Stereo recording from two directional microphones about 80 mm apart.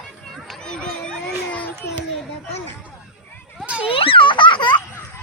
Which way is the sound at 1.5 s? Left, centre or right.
Left.